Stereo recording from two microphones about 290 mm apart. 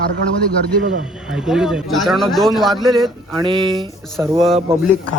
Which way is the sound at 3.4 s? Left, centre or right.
Centre.